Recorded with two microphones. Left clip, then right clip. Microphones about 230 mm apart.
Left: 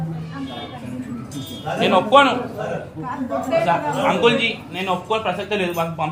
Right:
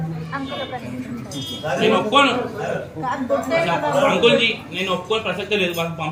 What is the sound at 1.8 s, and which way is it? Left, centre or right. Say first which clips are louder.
Speech: left 2 dB; left.